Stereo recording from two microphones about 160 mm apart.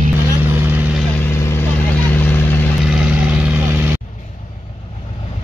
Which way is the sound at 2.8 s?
5° right (ahead or behind).